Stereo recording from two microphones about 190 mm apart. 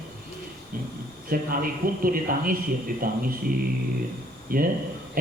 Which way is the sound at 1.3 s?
50° right (ahead or behind).